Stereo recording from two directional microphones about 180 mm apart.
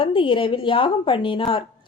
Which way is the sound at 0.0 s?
30° left (ahead or behind).